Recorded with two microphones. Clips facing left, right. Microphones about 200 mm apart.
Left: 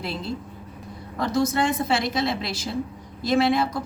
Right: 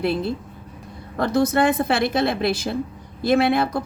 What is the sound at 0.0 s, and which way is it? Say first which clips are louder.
A woman's voice: right 7 dB; 60° right (ahead or behind).